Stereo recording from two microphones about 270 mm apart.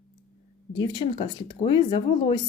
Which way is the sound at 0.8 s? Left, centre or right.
Centre.